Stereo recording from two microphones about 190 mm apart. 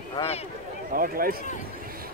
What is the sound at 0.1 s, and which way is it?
Speech, 30° left (ahead or behind).